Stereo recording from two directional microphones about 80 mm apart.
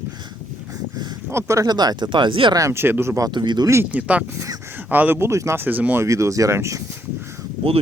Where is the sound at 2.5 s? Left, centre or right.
Right.